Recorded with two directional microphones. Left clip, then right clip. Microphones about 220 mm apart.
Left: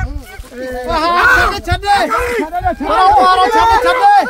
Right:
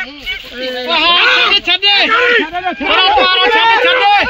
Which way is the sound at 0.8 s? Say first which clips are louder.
Right 1 dB; 40° left (ahead or behind).